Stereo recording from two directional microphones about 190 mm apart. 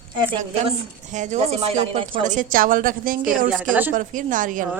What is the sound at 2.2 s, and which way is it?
Speech, 45° right (ahead or behind).